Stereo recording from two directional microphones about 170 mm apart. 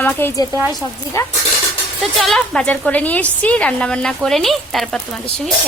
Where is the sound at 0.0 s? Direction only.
10° left (ahead or behind).